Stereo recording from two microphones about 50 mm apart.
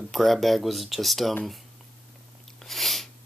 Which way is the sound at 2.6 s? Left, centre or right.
Centre.